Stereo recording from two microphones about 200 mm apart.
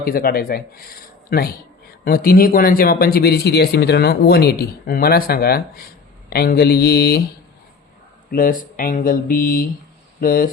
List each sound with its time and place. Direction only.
0.0 s speech: 45° left (ahead or behind)
8.3 s speech: 45° left (ahead or behind)